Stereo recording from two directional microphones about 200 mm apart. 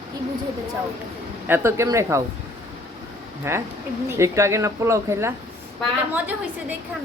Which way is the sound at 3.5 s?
15° right (ahead or behind).